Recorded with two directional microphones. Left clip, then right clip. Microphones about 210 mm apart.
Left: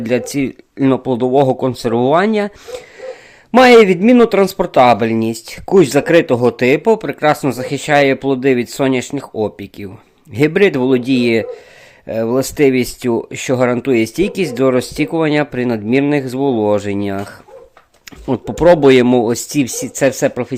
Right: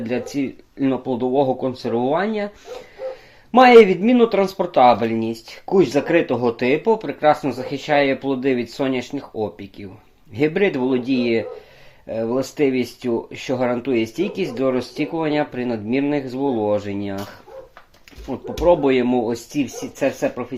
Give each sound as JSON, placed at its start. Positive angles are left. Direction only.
{"t": 0.0, "sound": "speech", "side_deg": 35}
{"t": 3.5, "sound": "speech", "side_deg": 35}
{"t": 18.3, "sound": "speech", "side_deg": 55}